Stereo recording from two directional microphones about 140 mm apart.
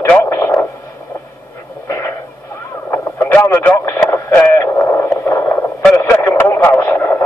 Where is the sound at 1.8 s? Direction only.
20° left (ahead or behind).